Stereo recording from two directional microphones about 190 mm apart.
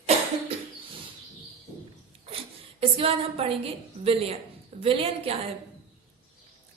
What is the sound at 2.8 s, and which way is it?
A woman's voice, 30° right (ahead or behind).